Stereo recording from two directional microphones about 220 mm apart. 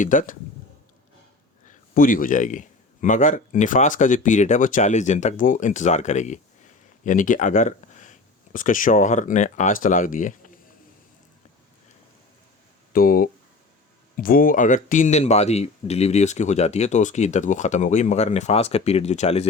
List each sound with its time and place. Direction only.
0.0 s speech: 35° left (ahead or behind)
1.6 s speech: 40° left (ahead or behind)
12.9 s speech: 40° left (ahead or behind)